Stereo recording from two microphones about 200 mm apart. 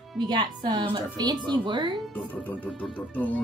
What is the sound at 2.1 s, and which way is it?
Speech, 10° left (ahead or behind).